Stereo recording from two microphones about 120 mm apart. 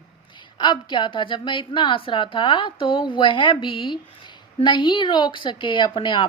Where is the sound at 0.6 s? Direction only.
40° left (ahead or behind).